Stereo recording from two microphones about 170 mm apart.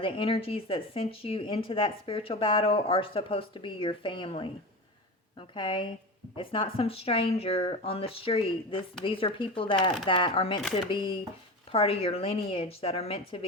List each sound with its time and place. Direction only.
0.0 s speech: 30° left (ahead or behind)
5.5 s speech: 30° left (ahead or behind)